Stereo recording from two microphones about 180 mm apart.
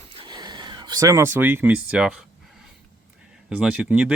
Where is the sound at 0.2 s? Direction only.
25° right (ahead or behind); by 2.6 s 5° right (ahead or behind).